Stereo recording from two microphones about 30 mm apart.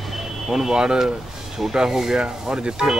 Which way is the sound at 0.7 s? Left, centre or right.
Right.